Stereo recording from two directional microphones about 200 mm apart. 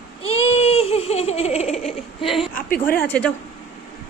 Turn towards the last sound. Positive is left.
turn(degrees=5)  # may be behind; listen again after turning